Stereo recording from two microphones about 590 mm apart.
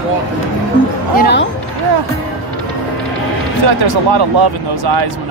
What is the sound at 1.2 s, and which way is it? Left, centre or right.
Speech, centre.